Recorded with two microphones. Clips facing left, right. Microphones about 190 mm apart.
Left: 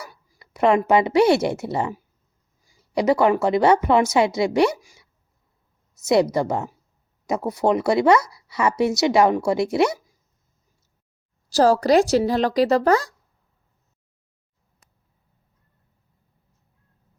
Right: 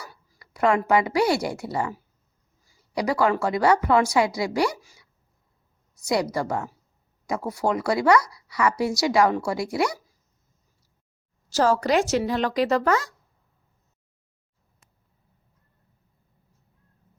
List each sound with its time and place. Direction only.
0.0 s a woman's voice: 15° left (ahead or behind)
6.3 s speech: 20° left (ahead or behind)
11.4 s speech: 35° left (ahead or behind)
14.8 s a sound: 40° left (ahead or behind)